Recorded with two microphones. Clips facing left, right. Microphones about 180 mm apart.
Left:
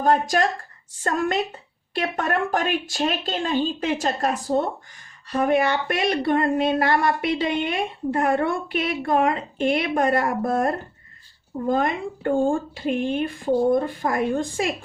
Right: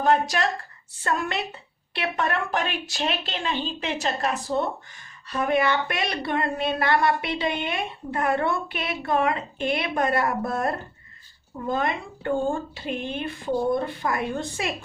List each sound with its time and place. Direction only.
0.0 s speech: 45° left (ahead or behind)